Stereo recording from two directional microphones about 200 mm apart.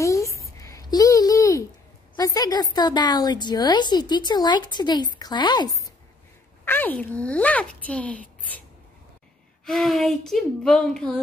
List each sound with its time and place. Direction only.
0.0 s a sound: 15° left (ahead or behind)
2.1 s a woman's voice: 20° left (ahead or behind)
6.6 s speech: 10° left (ahead or behind)
9.7 s speech: centre (ahead or behind)